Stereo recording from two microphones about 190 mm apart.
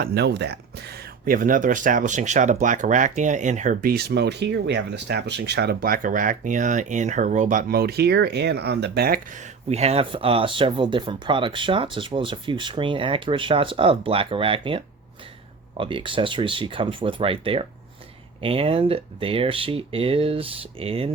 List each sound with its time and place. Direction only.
0.0 s speech: 60° right (ahead or behind)
1.2 s speech: 45° right (ahead or behind)
9.6 s speech: 35° right (ahead or behind)
15.8 s speech: 25° right (ahead or behind)